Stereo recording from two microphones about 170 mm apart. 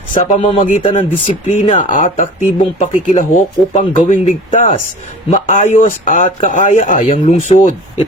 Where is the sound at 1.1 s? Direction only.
45° left (ahead or behind).